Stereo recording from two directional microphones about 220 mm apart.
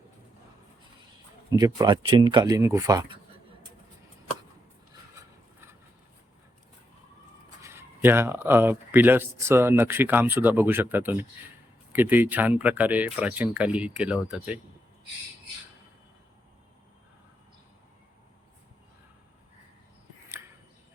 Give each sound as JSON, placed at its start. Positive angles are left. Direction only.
{"t": 1.5, "sound": "speech", "side_deg": -15}
{"t": 5.2, "sound": "a sound", "side_deg": -15}
{"t": 7.6, "sound": "speech", "side_deg": -10}